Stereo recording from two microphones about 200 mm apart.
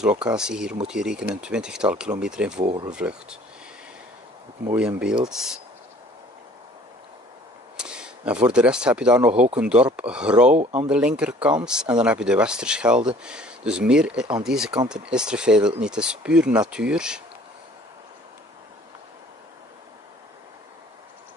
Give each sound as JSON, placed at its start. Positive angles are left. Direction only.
{"t": 0.0, "sound": "speech", "side_deg": -5}
{"t": 2.6, "sound": "speech", "side_deg": -25}
{"t": 2.9, "sound": "speech", "side_deg": -5}
{"t": 4.7, "sound": "speech", "side_deg": -5}
{"t": 7.7, "sound": "speech", "side_deg": -5}
{"t": 10.5, "sound": "speech", "side_deg": -35}
{"t": 10.9, "sound": "speech", "side_deg": -5}